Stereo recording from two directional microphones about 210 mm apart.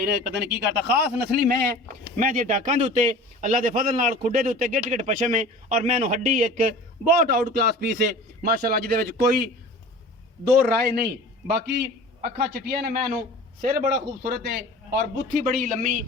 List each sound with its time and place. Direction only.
0.0 s a man's voice: 50° right (ahead or behind)
10.6 s a man's voice: 50° right (ahead or behind)